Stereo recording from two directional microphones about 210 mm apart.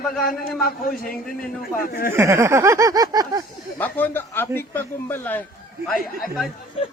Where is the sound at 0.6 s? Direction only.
45° left (ahead or behind).